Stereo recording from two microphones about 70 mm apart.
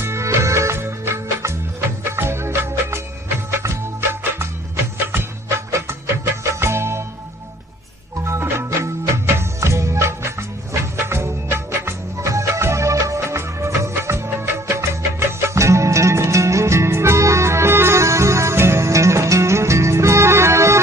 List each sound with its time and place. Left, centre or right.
0.0 s music: right
8.3 s music: right